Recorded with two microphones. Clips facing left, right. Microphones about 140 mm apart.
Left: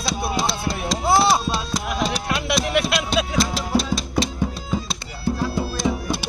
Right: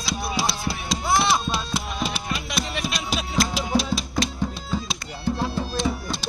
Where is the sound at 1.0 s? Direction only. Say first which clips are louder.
Left 4 dB; 30° left (ahead or behind).